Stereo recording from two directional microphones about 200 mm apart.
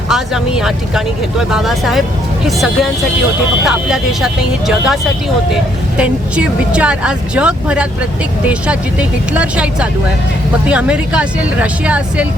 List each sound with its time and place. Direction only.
0.1 s speech: centre (ahead or behind)
6.0 s speech: 5° right (ahead or behind)